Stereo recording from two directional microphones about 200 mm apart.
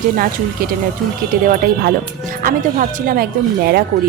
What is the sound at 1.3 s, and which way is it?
Speech, 50° right (ahead or behind).